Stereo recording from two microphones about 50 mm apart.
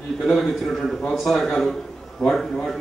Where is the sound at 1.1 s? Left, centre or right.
Centre.